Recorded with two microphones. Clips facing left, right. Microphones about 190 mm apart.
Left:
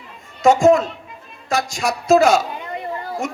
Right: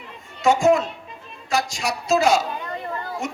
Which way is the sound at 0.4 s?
50° left (ahead or behind).